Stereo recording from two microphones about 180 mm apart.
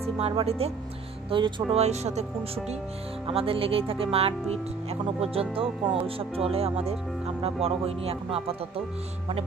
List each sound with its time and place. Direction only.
0.0 s speech: 35° right (ahead or behind)